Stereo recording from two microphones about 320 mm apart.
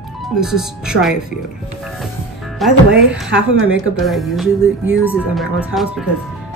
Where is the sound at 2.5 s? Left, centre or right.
Centre.